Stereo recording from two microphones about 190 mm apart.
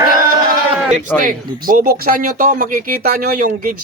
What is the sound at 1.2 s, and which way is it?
Speech, 45° right (ahead or behind).